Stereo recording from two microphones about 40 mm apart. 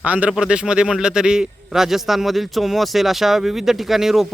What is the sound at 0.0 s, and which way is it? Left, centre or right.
Speech, right.